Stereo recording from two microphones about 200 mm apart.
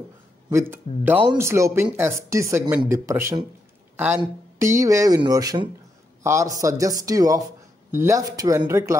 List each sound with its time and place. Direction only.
0.5 s speech: 10° right (ahead or behind)
3.9 s a sound: 10° right (ahead or behind)
4.2 s speech: 15° right (ahead or behind)